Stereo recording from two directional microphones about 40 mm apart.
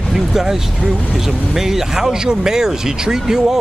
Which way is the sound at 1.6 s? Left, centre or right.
Centre.